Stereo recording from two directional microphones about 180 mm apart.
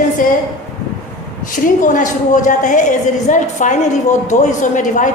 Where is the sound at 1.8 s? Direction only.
45° left (ahead or behind).